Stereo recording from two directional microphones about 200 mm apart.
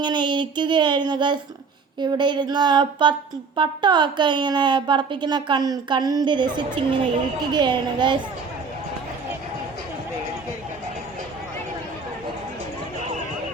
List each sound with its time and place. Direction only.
0.0 s a woman's voice: 25° right (ahead or behind)